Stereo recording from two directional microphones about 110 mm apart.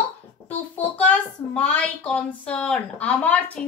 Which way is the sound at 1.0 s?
10° left (ahead or behind).